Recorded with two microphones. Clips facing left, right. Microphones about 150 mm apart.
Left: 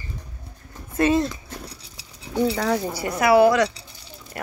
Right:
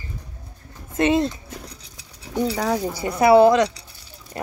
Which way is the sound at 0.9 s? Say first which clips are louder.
Right 1 dB; 20° right (ahead or behind).